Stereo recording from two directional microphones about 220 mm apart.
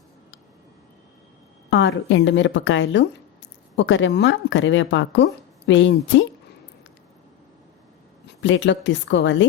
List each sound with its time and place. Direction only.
1.7 s speech: 60° left (ahead or behind)
8.4 s speech: 55° left (ahead or behind)